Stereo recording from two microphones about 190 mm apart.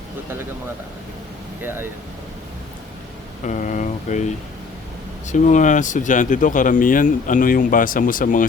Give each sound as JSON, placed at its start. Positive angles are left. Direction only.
{"t": 1.6, "sound": "speech", "side_deg": -10}
{"t": 3.4, "sound": "speech", "side_deg": 40}
{"t": 5.3, "sound": "speech", "side_deg": 40}